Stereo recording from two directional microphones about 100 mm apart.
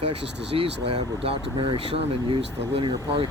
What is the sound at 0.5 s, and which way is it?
Speech, 65° right (ahead or behind).